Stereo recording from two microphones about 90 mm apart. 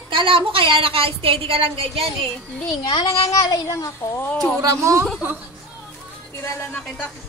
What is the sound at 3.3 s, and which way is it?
A woman's voice, 40° left (ahead or behind).